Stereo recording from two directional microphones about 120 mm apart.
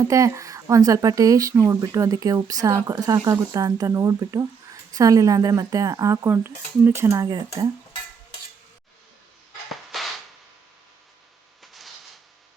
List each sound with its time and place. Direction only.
0.0 s speech: 25° right (ahead or behind)
9.9 s cap gun: centre (ahead or behind)
11.6 s a sound: centre (ahead or behind)